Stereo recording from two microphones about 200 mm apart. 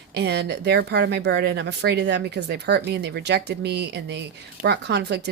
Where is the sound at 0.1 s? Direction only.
55° right (ahead or behind).